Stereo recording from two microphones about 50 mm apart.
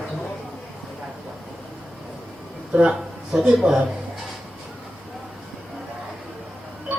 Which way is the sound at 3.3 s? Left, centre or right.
Centre.